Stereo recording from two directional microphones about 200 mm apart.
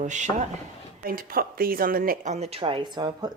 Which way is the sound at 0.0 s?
35° right (ahead or behind).